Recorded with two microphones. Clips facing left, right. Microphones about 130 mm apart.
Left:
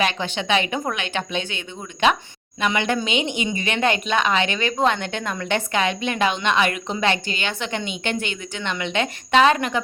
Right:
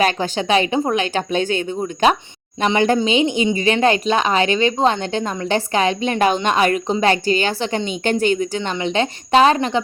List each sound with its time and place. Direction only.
0.0 s a woman's voice: 40° right (ahead or behind)